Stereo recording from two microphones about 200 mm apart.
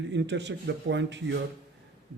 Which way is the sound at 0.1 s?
60° right (ahead or behind).